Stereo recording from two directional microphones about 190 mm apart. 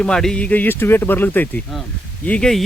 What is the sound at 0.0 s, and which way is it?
Speech, 5° left (ahead or behind).